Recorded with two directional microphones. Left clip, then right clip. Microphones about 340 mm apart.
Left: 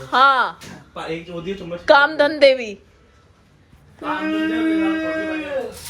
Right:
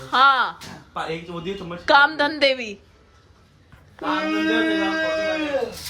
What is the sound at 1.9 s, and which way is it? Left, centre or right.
Speech, centre.